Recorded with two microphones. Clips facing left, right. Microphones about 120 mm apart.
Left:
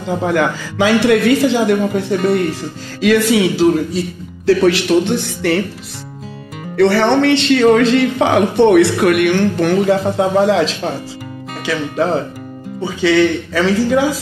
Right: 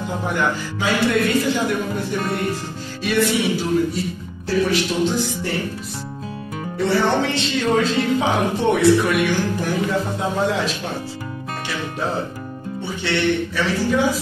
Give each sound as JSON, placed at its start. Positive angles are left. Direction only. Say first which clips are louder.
{"t": 0.3, "sound": "speech", "louder": "left 4 dB", "side_deg": 90}
{"t": 6.8, "sound": "a man's voice", "louder": "left 7 dB", "side_deg": 80}
{"t": 13.0, "sound": "speech", "louder": "left 8 dB", "side_deg": 90}